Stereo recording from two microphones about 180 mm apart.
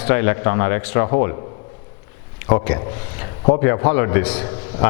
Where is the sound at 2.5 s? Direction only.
20° left (ahead or behind).